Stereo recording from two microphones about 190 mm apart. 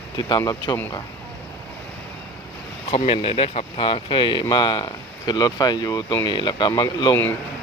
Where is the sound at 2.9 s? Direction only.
30° left (ahead or behind).